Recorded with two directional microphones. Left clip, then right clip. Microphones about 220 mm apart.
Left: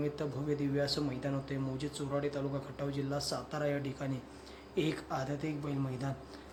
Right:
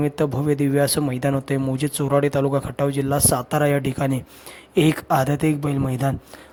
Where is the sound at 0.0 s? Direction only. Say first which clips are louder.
Right 15 dB; 45° right (ahead or behind).